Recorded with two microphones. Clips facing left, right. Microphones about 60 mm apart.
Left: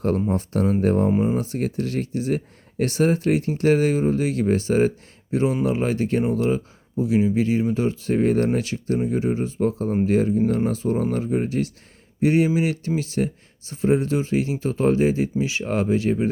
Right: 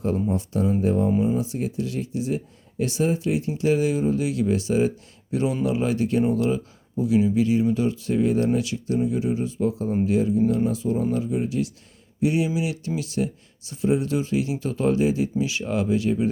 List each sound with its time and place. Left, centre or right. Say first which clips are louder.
0.3 s speech: left 2 dB; left
1.1 s speech: left 1 dB; left
1.4 s speech: left 2 dB; left
5.3 s speech: left 2 dB; left